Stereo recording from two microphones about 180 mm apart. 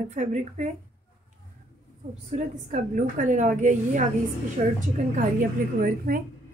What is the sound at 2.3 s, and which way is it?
A woman's voice, 45° right (ahead or behind).